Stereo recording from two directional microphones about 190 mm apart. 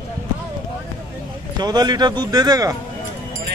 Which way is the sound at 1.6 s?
20° right (ahead or behind).